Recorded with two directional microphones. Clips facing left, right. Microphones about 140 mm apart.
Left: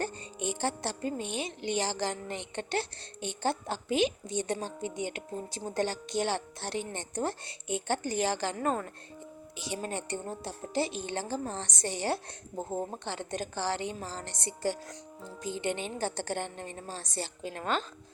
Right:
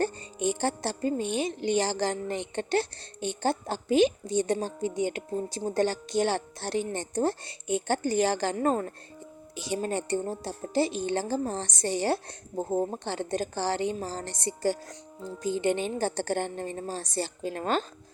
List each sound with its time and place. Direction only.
0.0 s speech: 40° right (ahead or behind)